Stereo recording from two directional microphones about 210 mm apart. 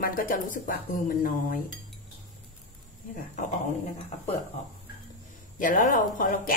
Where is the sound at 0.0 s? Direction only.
40° left (ahead or behind).